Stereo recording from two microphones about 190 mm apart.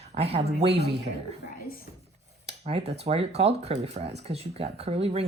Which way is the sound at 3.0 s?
30° right (ahead or behind).